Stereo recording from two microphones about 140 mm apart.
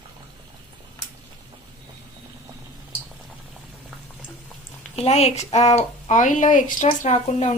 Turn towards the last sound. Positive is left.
turn(degrees=55)  # may be behind; listen again after turning